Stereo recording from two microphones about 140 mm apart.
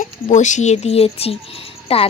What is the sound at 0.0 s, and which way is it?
A woman's voice, 60° left (ahead or behind).